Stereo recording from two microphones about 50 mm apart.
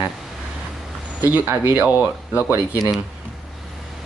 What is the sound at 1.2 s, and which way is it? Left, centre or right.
Speech, right.